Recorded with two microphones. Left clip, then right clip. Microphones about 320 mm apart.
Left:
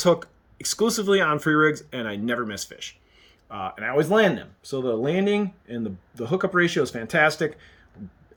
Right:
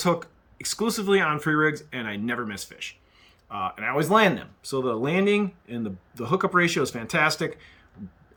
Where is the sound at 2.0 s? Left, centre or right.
Left.